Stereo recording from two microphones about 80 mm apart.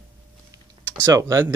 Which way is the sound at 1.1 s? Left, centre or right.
Right.